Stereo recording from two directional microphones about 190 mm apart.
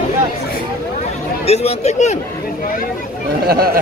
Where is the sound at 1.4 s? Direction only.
35° left (ahead or behind).